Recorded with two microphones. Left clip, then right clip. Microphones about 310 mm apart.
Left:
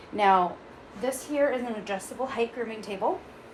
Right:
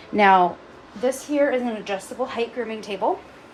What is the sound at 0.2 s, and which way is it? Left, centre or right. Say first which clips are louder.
Speech: right 6 dB; right.